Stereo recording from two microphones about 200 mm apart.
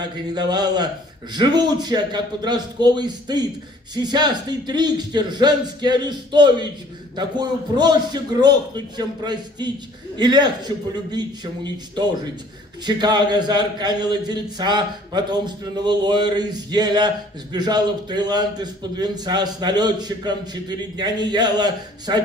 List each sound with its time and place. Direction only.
0.0 s a man's voice: 20° right (ahead or behind)